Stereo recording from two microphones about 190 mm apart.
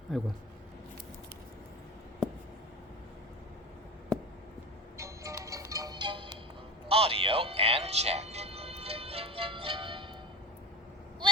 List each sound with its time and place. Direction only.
0.1 s speech: centre (ahead or behind)
4.9 s music: 15° right (ahead or behind)